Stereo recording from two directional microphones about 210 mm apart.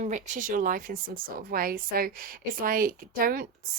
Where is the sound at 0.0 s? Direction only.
35° right (ahead or behind).